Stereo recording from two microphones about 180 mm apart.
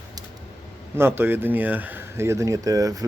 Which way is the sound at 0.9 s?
15° right (ahead or behind).